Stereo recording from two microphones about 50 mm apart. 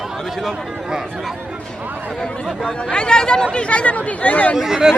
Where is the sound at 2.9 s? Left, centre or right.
Centre.